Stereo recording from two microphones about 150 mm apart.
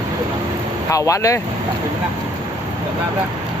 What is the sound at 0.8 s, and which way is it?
Speech, 20° left (ahead or behind).